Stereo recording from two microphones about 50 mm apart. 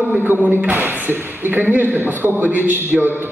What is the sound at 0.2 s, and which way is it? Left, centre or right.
Speech, right.